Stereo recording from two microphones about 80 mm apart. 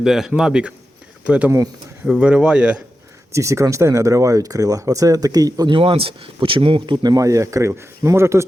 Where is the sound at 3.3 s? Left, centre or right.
Right.